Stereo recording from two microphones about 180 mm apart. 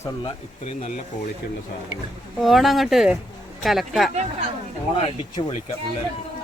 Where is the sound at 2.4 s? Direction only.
Centre (ahead or behind).